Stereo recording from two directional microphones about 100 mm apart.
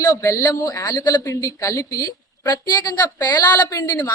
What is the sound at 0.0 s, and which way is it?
A woman's voice, 35° left (ahead or behind).